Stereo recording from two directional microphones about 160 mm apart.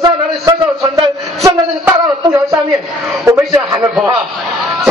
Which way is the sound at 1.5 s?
20° right (ahead or behind).